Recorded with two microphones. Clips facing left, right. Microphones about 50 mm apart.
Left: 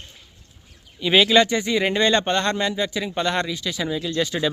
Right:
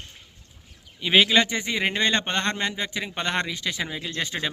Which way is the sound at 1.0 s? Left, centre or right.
Centre.